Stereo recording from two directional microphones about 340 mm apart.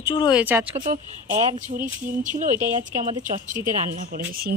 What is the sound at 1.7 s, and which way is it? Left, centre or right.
Speech, right.